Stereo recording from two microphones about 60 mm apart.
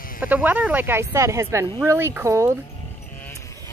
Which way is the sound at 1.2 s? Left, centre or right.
Right.